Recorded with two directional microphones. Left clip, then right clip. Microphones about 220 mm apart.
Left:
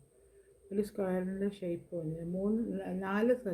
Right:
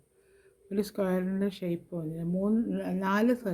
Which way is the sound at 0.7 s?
50° right (ahead or behind).